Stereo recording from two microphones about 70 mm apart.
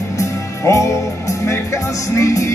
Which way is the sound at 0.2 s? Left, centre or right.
Left.